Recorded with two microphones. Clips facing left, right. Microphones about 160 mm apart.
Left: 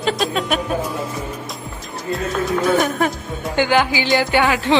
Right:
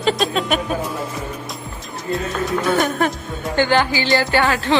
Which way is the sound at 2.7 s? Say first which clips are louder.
Right 1 dB; centre (ahead or behind).